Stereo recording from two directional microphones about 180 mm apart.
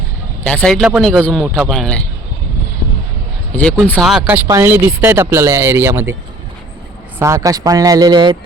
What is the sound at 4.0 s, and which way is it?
Speech, 5° right (ahead or behind).